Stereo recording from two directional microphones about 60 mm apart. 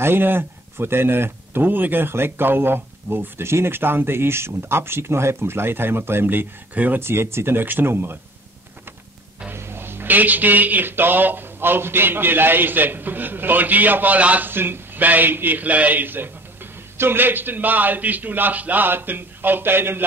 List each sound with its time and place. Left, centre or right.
0.0 s speech: right
7.0 s speech: right
9.5 s speech: right
14.5 s speech: right